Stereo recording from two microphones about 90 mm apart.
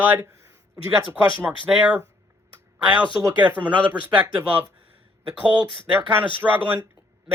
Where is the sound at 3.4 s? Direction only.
20° right (ahead or behind).